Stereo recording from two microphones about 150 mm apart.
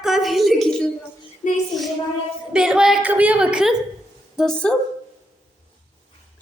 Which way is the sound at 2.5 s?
5° right (ahead or behind).